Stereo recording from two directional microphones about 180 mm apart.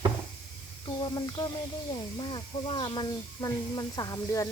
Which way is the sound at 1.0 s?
20° left (ahead or behind).